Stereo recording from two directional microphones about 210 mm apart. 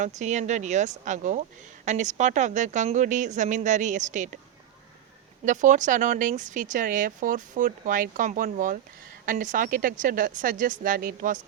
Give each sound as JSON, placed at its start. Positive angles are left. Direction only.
{"t": 0.0, "sound": "speech", "side_deg": -35}
{"t": 5.5, "sound": "speech", "side_deg": -35}